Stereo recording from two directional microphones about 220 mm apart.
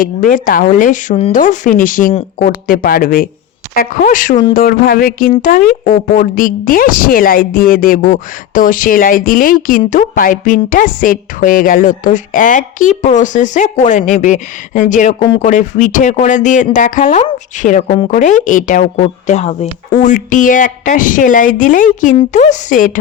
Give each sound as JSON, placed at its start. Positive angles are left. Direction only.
{"t": 0.0, "sound": "a woman's voice", "side_deg": 40}